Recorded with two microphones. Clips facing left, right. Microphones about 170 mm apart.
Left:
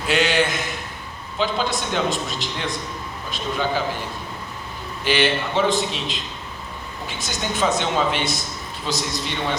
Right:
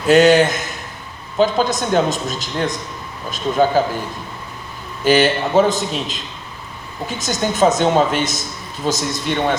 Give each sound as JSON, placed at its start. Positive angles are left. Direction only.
{"t": 0.1, "sound": "a man's voice", "side_deg": -45}
{"t": 5.0, "sound": "a man's voice", "side_deg": -40}